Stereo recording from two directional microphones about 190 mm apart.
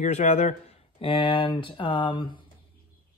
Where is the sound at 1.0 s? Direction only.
25° left (ahead or behind).